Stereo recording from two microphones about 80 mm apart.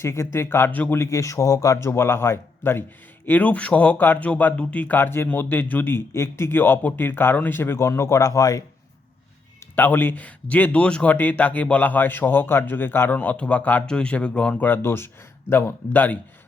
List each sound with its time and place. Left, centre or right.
0.0 s speech: left
0.9 s speech: left
3.2 s speech: centre; by 8.6 s left
9.7 s speech: left